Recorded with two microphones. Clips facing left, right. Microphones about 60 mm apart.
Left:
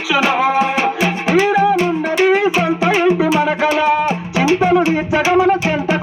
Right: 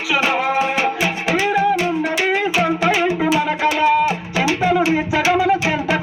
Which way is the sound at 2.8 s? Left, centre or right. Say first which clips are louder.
Left 3 dB; left.